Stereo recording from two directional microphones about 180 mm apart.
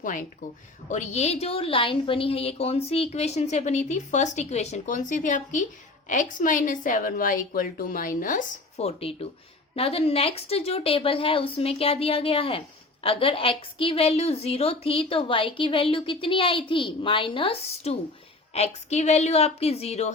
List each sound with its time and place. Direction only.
0.0 s a woman's voice: 45° left (ahead or behind)